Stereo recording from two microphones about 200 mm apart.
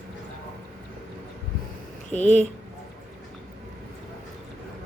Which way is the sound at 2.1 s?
35° left (ahead or behind).